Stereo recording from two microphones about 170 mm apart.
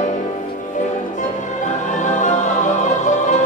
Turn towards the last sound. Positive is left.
turn(degrees=45)  # may be behind; listen again after turning